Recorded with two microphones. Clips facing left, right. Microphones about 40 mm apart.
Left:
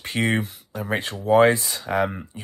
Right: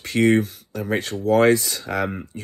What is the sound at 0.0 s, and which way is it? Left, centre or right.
Speech, left.